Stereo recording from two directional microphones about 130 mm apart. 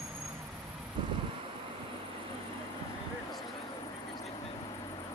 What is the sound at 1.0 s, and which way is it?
Wind, 40° right (ahead or behind).